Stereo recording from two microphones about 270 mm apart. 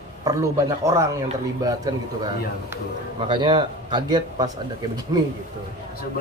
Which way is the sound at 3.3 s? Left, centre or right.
Centre.